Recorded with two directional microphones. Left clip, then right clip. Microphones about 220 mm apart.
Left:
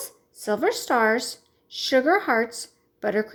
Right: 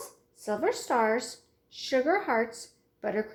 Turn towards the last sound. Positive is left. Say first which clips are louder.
# left 6 dB
turn(degrees=45)  # may be behind; listen again after turning